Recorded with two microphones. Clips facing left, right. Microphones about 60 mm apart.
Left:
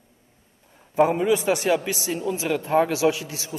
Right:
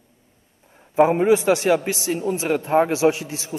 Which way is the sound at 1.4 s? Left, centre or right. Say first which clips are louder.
Right 3 dB; right.